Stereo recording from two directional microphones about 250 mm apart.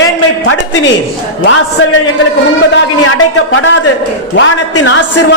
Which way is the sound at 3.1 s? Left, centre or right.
Left.